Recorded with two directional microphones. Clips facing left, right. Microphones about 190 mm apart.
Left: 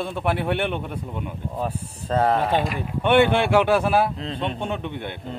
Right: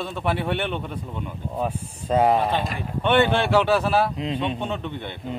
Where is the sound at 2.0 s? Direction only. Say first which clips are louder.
Right 2 dB; 10° right (ahead or behind).